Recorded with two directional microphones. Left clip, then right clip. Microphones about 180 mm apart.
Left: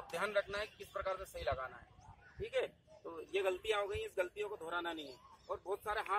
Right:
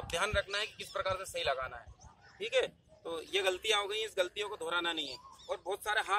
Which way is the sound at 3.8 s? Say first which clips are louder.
Right 5 dB; 35° right (ahead or behind).